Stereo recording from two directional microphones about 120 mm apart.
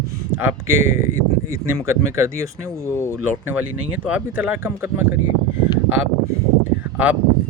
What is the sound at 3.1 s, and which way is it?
Speech, 15° right (ahead or behind).